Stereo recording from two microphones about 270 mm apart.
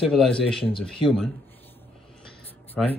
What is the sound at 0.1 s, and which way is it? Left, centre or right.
Speech, centre.